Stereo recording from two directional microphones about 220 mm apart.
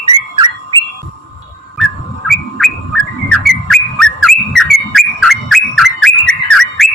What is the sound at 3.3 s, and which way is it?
Whistling, centre (ahead or behind).